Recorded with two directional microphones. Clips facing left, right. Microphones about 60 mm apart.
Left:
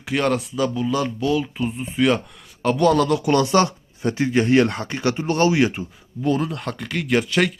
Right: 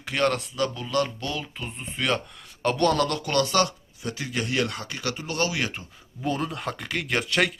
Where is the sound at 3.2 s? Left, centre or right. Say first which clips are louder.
Left 6 dB; centre.